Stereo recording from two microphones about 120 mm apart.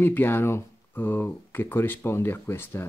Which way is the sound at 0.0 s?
20° left (ahead or behind).